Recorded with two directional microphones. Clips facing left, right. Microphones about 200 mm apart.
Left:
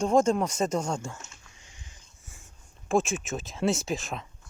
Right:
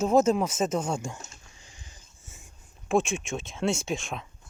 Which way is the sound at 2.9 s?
Centre (ahead or behind).